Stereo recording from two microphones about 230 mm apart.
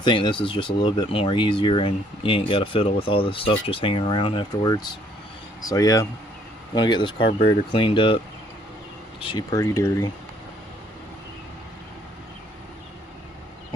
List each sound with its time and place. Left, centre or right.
0.0 s speech: left
9.2 s speech: centre